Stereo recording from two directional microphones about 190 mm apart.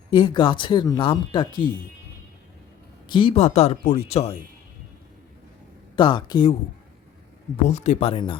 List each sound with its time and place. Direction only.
0.1 s speech: 25° left (ahead or behind)
3.1 s speech: 25° left (ahead or behind)
6.0 s speech: 25° left (ahead or behind)
7.5 s speech: 35° left (ahead or behind)